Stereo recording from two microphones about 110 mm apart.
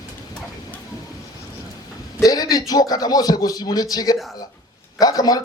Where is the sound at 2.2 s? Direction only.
35° left (ahead or behind).